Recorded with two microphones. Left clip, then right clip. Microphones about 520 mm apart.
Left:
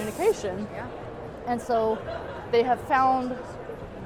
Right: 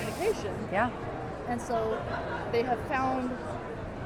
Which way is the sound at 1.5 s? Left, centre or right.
Left.